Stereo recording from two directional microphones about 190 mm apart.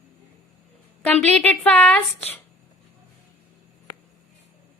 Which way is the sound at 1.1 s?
5° left (ahead or behind).